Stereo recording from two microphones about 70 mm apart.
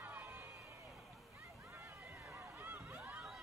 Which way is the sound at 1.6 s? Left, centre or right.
Right.